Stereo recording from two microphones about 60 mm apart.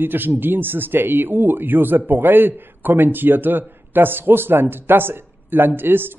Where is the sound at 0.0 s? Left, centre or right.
Right.